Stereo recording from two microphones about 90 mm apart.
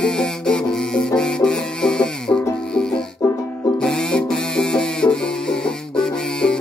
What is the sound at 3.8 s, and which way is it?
Music, 10° left (ahead or behind).